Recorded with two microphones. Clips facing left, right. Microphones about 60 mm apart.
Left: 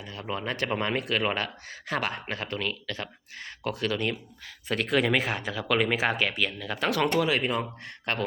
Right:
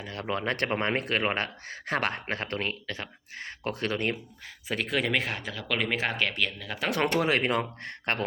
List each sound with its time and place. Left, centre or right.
0.1 s speech: right
0.7 s speech: right
2.8 s speech: right
4.7 s speech: centre
7.1 s speech: right